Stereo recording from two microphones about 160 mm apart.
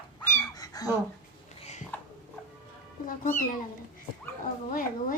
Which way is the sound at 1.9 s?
10° left (ahead or behind).